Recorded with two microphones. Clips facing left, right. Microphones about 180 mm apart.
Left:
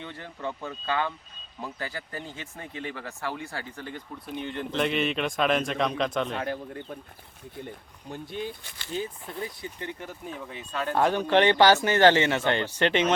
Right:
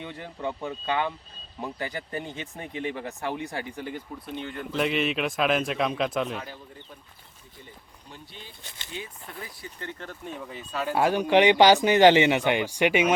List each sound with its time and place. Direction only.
0.0 s a man's voice: 15° right (ahead or behind)
6.4 s speech: 65° left (ahead or behind)
8.1 s speech: 50° left (ahead or behind)
8.9 s speech: 35° left (ahead or behind)
9.6 s speech: 15° left (ahead or behind)
10.2 s speech: centre (ahead or behind)